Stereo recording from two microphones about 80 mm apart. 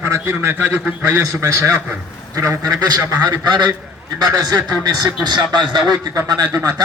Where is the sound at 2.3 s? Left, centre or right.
Right.